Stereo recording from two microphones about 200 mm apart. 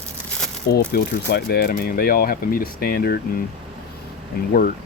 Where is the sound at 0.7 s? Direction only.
50° left (ahead or behind).